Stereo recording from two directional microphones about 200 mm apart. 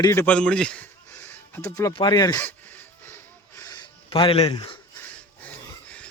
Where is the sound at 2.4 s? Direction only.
10° left (ahead or behind); by 4.8 s 25° left (ahead or behind).